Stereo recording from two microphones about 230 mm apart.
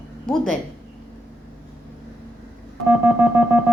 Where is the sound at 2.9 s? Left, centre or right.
Centre.